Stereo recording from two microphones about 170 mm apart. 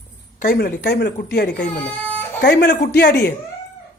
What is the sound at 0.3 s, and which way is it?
Speech, 55° left (ahead or behind).